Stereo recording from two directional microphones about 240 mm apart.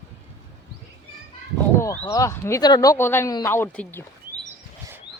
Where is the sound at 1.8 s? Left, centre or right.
Centre.